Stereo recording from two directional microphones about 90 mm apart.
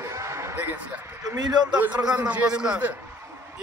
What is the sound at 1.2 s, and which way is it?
Speech, 45° right (ahead or behind).